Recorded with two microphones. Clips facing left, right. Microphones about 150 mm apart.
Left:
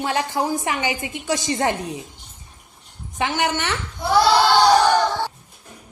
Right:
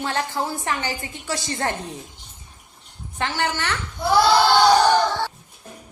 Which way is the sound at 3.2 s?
20° left (ahead or behind).